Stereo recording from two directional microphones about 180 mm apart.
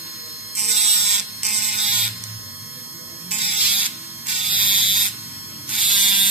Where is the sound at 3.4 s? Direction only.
10° right (ahead or behind).